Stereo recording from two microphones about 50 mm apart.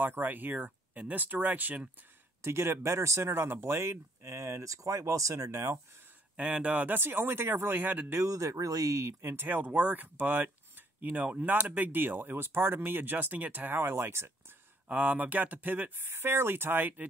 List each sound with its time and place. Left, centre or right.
0.0 s speech: right
2.4 s speech: right
6.3 s speech: right
7.0 s speech: right
8.1 s speech: right
9.2 s speech: right
13.9 s speech: right
14.9 s speech: right